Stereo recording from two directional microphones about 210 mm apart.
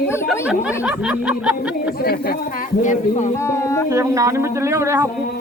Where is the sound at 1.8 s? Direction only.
45° left (ahead or behind).